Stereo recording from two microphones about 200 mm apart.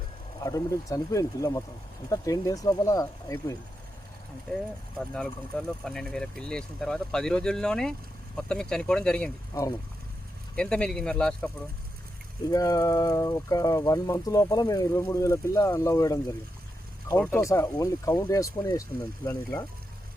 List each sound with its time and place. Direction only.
0.3 s speech: 15° left (ahead or behind)
4.5 s speech: 5° left (ahead or behind)
12.5 s speech: 20° left (ahead or behind)